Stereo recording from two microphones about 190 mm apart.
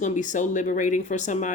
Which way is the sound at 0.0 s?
40° left (ahead or behind).